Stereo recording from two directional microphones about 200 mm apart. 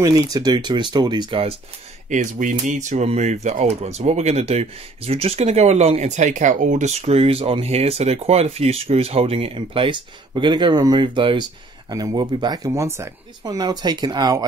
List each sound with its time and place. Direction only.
0.0 s speech: 20° right (ahead or behind)
2.0 s speech: 40° right (ahead or behind); by 14.4 s 20° right (ahead or behind)